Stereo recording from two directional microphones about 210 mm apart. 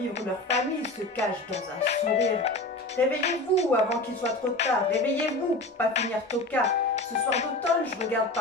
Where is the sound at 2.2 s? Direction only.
30° left (ahead or behind).